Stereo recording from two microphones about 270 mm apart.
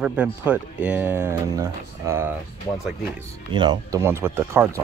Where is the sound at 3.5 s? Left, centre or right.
Centre.